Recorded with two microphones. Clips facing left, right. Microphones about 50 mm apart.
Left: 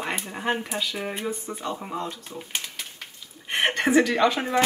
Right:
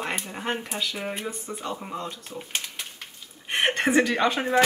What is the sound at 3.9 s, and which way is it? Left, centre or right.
Speech, centre.